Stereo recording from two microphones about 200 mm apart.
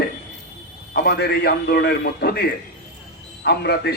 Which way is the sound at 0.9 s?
55° left (ahead or behind).